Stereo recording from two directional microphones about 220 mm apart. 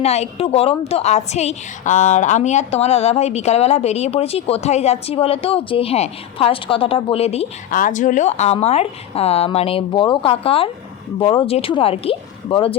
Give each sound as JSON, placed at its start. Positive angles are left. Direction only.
{"t": 0.0, "sound": "a woman's voice", "side_deg": 30}